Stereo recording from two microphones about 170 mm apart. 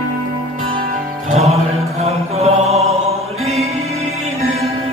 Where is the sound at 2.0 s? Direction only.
40° right (ahead or behind).